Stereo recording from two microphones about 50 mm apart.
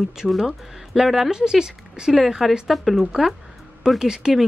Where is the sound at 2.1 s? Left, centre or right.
Centre.